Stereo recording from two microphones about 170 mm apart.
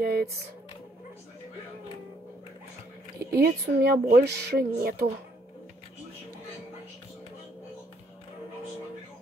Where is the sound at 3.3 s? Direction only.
65° right (ahead or behind).